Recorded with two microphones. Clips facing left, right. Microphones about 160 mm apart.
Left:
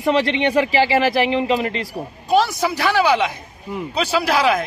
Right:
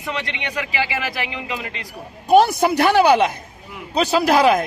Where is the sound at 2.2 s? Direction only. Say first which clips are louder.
Right 4 dB; 55° right (ahead or behind).